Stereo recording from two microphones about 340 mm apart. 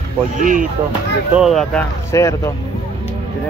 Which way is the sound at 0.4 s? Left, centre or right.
Right.